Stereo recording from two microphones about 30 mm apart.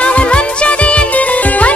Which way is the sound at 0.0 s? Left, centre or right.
Left.